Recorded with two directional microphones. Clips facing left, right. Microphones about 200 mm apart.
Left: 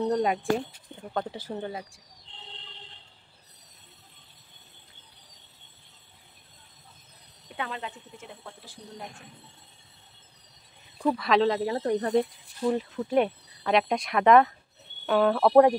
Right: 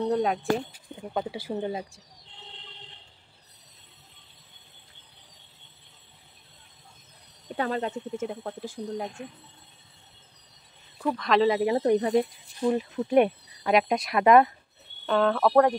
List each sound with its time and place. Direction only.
0.0 s speech: centre (ahead or behind); by 2.0 s 25° right (ahead or behind)
7.4 s speech: 40° right (ahead or behind)
11.0 s speech: 10° left (ahead or behind); by 14.5 s 5° right (ahead or behind)
15.0 s speech: 10° left (ahead or behind)